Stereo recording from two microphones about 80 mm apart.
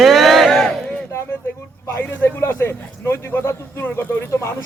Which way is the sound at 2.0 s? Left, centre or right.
Left.